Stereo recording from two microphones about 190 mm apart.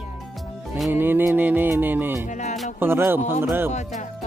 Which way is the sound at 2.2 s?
40° left (ahead or behind).